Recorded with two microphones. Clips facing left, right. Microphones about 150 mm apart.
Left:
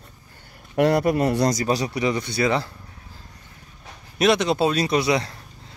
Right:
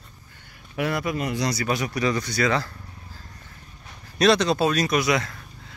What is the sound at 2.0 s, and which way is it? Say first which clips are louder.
Speech: left 1 dB; 25° left (ahead or behind).